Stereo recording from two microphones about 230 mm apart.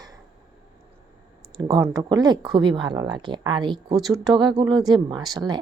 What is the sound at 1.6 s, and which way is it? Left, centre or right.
Speech, centre.